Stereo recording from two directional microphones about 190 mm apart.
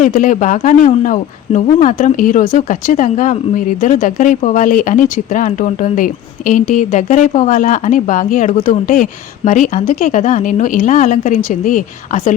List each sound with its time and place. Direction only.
0.0 s speech: 45° left (ahead or behind)